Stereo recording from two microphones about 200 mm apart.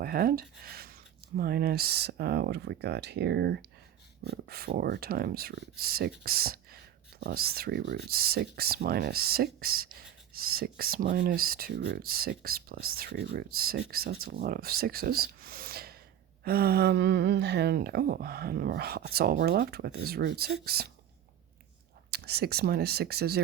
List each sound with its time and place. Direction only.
0.0 s speech: 50° right (ahead or behind)
22.1 s speech: 50° right (ahead or behind)